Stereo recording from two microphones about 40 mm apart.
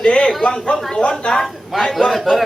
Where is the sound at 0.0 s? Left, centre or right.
Left.